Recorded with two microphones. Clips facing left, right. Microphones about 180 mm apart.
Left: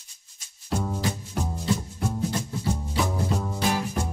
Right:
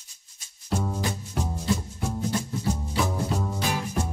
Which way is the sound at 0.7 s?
Centre (ahead or behind).